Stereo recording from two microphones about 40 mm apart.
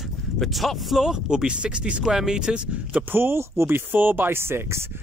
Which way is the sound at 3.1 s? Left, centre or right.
Right.